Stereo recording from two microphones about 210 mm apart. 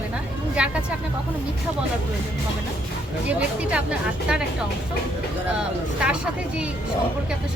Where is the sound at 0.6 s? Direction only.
5° right (ahead or behind).